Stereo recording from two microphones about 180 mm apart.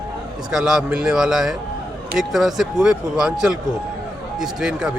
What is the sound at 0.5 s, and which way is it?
A man's voice, 5° right (ahead or behind).